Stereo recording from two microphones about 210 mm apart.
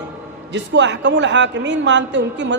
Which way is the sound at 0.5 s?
55° right (ahead or behind).